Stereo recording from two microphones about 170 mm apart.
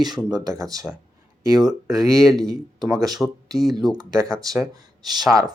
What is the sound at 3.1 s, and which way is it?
Speech, centre (ahead or behind).